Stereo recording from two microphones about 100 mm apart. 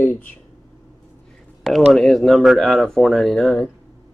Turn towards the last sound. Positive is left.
turn(degrees=5)  # may be behind; listen again after turning